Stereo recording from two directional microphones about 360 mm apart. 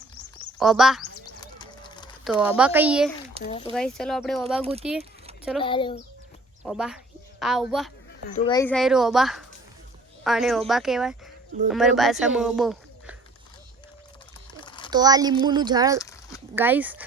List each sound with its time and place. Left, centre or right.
0.6 s speech: centre
1.4 s clip-clop: centre
2.2 s speech: centre
3.4 s speech: centre
3.7 s speech: centre
4.6 s speech: centre
5.6 s speech: centre
6.7 s a woman's voice: centre
8.3 s speech: centre
14.6 s a sound: centre
14.8 s speech: centre
16.0 s a sound: centre
16.6 s speech: centre